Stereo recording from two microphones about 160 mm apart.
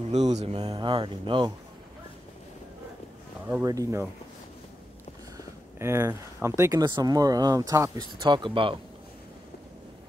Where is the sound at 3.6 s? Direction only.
20° right (ahead or behind).